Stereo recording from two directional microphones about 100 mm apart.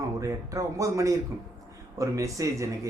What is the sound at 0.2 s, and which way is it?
Speech, 35° right (ahead or behind).